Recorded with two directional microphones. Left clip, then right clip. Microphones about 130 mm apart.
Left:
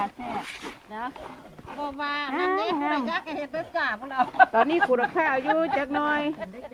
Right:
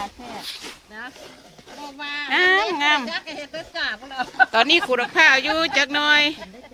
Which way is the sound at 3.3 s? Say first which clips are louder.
Left 2 dB; 45° left (ahead or behind).